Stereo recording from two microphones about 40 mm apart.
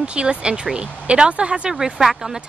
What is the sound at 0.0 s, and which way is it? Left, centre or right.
Speech, right.